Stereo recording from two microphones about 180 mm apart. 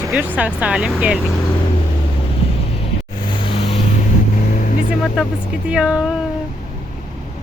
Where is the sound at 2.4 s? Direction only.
30° left (ahead or behind).